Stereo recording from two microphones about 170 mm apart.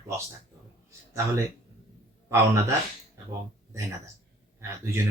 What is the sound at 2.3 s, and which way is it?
Speech, 15° right (ahead or behind).